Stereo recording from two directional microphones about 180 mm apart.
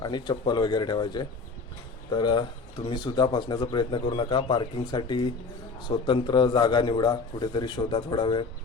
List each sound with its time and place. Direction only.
0.0 s speech: 25° left (ahead or behind)